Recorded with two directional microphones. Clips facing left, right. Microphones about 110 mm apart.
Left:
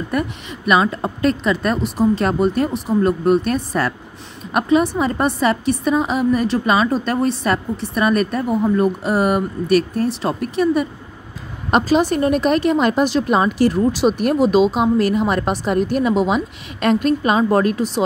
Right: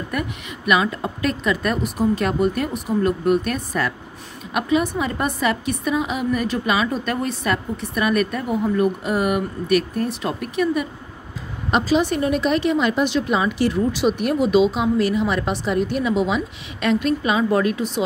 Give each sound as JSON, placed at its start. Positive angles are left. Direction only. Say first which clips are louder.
{"t": 0.1, "sound": "a woman's voice", "louder": "left 5 dB", "side_deg": 30}
{"t": 11.7, "sound": "a woman's voice", "louder": "left 3 dB", "side_deg": 45}